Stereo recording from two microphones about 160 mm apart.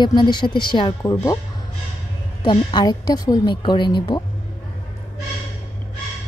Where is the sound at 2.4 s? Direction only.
30° left (ahead or behind).